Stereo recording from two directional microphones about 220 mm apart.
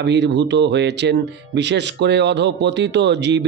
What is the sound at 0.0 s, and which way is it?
A man's voice, 55° right (ahead or behind).